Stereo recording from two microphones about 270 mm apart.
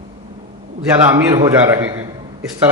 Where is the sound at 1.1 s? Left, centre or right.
Centre.